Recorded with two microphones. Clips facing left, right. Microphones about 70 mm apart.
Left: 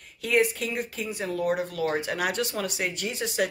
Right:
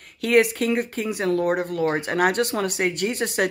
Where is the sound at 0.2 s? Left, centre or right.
Right.